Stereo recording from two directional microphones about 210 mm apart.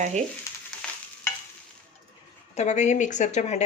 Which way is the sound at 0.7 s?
5° left (ahead or behind).